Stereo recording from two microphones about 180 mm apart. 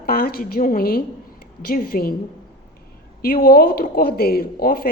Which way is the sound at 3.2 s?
55° left (ahead or behind).